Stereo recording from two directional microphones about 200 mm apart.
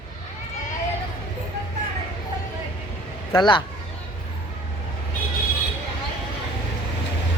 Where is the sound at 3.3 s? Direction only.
20° left (ahead or behind).